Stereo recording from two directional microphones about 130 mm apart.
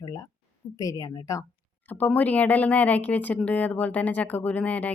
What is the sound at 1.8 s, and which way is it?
Speech, 15° left (ahead or behind).